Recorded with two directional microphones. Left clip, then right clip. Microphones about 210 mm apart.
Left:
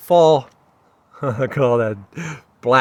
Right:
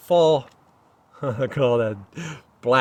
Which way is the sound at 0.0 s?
30° left (ahead or behind).